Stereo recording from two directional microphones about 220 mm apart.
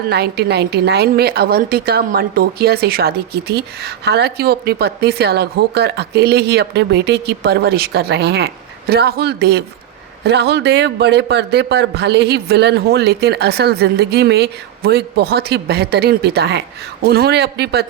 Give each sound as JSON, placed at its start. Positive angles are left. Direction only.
{"t": 0.1, "sound": "a woman's voice", "side_deg": -45}